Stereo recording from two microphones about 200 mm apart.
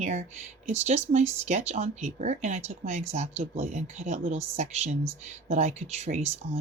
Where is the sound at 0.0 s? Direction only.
35° right (ahead or behind).